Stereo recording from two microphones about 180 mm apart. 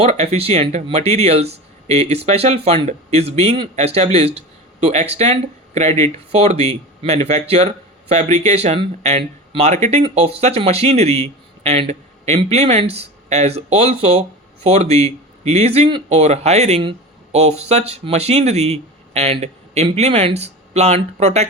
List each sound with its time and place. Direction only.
0.0 s a man's voice: 35° right (ahead or behind)